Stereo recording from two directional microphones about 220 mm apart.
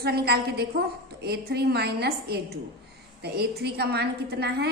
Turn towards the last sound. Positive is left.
turn(degrees=-50)  # may be behind; listen again after turning